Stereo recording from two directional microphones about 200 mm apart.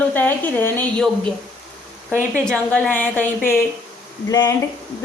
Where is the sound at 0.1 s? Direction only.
10° left (ahead or behind).